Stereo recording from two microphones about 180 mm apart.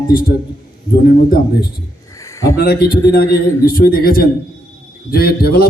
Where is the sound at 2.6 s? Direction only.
55° left (ahead or behind).